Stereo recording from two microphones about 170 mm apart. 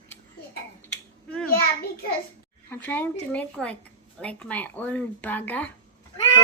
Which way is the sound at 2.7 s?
10° left (ahead or behind).